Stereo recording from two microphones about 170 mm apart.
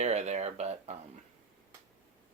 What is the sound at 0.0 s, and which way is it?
Speech, 40° right (ahead or behind).